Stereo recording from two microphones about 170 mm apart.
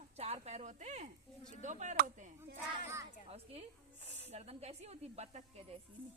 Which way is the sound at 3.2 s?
35° right (ahead or behind).